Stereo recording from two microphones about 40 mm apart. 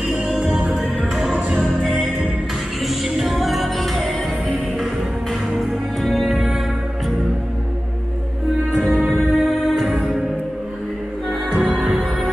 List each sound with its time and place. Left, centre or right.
0.1 s music: centre
2.9 s music: centre
5.5 s music: centre
9.0 s music: centre
11.5 s music: centre